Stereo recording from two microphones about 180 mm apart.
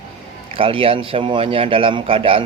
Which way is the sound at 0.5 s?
30° right (ahead or behind).